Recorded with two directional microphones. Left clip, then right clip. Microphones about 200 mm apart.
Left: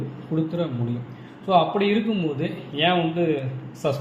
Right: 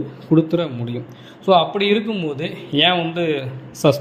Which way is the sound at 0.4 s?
50° right (ahead or behind).